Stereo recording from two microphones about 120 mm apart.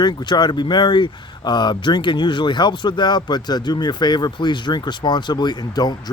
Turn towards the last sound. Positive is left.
turn(degrees=35)  # may be behind; listen again after turning